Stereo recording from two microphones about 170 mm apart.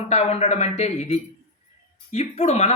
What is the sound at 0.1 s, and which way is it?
Speech, 40° left (ahead or behind).